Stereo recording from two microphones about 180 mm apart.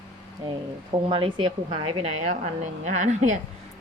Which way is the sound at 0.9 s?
30° right (ahead or behind).